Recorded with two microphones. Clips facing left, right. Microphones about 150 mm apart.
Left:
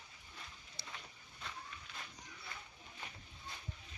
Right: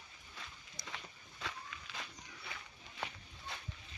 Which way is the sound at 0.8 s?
30° left (ahead or behind).